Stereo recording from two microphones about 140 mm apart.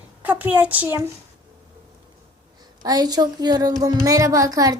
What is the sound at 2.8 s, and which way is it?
Speech, 30° right (ahead or behind).